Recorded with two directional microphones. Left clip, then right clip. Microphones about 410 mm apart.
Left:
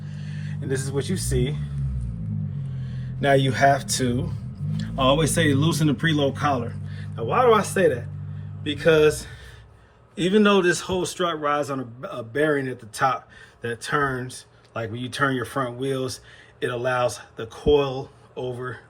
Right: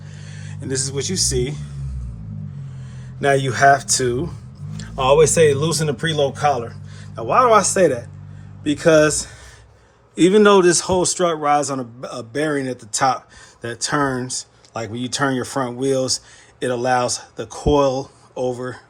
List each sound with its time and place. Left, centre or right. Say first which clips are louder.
0.0 s a sound: even; centre
0.6 s speech: right 3 dB; centre
2.8 s a man's voice: right 4 dB; centre